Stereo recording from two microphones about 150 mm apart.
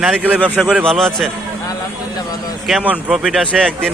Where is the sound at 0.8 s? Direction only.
5° left (ahead or behind).